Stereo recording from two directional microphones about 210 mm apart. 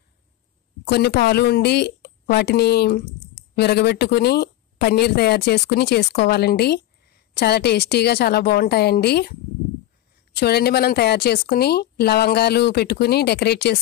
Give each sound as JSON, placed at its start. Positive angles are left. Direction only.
{"t": 0.8, "sound": "a woman's voice", "side_deg": 50}